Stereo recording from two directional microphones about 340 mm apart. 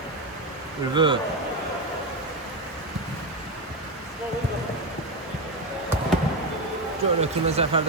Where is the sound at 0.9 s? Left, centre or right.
Centre.